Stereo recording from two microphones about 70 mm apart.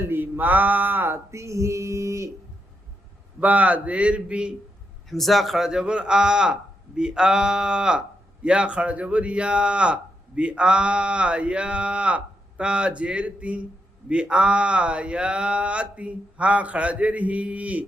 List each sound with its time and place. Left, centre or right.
0.0 s speech: right
1.3 s female singing: right
3.4 s speech: right
5.0 s speech: centre; by 17.8 s right